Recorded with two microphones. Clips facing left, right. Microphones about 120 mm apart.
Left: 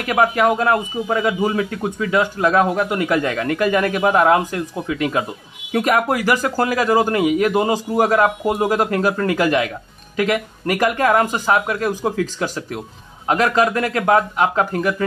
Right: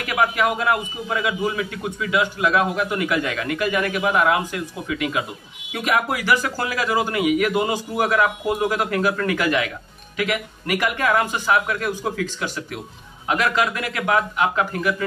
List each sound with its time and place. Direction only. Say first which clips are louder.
0.0 s a man's voice: left 4 dB; 35° left (ahead or behind)